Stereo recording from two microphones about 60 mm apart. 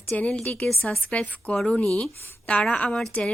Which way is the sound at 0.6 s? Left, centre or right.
Centre.